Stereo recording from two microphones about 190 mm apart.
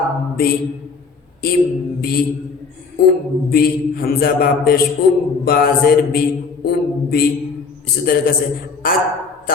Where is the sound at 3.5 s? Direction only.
50° left (ahead or behind).